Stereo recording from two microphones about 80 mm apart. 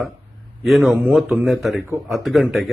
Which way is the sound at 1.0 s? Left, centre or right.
Centre.